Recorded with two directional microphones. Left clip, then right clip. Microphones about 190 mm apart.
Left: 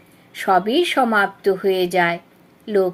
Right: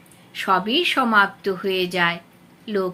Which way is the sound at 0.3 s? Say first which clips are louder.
Left 3 dB; 45° left (ahead or behind).